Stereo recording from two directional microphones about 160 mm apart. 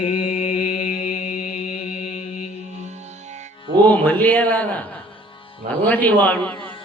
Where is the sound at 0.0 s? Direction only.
40° left (ahead or behind); by 1.4 s 55° left (ahead or behind).